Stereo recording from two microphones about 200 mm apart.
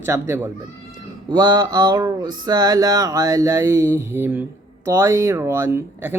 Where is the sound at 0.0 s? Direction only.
10° right (ahead or behind).